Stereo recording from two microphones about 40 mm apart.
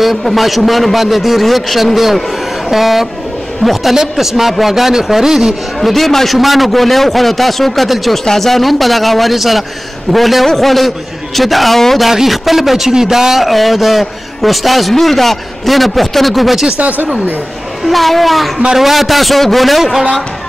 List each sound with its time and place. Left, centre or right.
0.0 s a man's voice: centre
5.8 s a man's voice: centre
12.1 s a man's voice: centre
16.7 s speech: right
17.8 s a man's voice: centre